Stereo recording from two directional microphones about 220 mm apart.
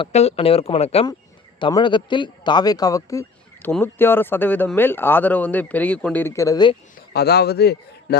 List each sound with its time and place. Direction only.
0.0 s speech: 30° left (ahead or behind)
7.1 s a man's voice: 45° left (ahead or behind)